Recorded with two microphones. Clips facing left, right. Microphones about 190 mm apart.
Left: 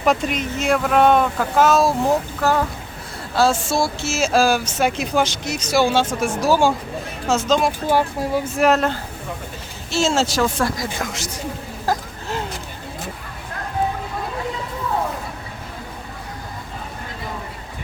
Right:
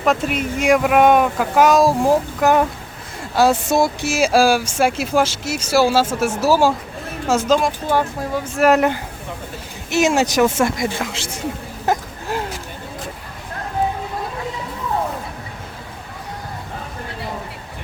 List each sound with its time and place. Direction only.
0.0 s speech: centre (ahead or behind)
7.6 s speech: 10° left (ahead or behind)
8.6 s speech: 15° right (ahead or behind)
11.9 s a sound: 20° right (ahead or behind)